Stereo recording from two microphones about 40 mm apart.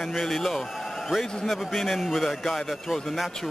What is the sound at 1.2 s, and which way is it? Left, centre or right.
Speech, centre.